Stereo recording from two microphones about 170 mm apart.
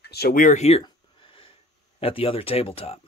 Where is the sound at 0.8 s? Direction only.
30° left (ahead or behind).